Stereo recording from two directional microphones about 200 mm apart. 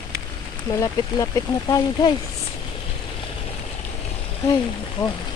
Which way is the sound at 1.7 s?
20° left (ahead or behind).